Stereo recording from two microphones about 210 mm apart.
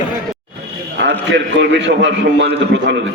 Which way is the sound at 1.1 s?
55° right (ahead or behind).